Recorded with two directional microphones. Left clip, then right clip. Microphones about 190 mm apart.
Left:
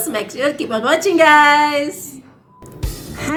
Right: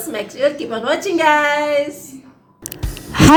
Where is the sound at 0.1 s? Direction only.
5° left (ahead or behind).